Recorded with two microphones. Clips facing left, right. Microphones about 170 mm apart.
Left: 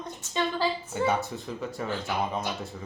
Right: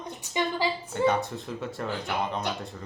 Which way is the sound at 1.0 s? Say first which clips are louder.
Right 3 dB; centre (ahead or behind).